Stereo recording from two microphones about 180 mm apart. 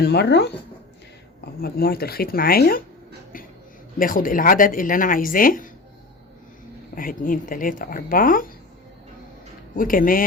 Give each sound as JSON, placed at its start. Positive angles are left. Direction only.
{"t": 0.0, "sound": "speech", "side_deg": 65}
{"t": 1.6, "sound": "speech", "side_deg": 60}
{"t": 3.9, "sound": "speech", "side_deg": 50}
{"t": 6.9, "sound": "speech", "side_deg": 50}
{"t": 9.7, "sound": "speech", "side_deg": 50}